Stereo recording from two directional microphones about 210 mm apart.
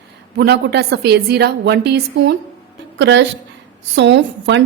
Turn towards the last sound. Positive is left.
turn(degrees=-55)  # may be behind; listen again after turning